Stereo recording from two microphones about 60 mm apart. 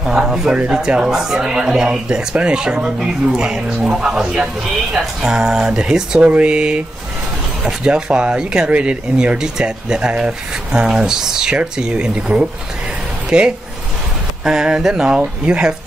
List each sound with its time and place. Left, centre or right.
0.0 s speech: centre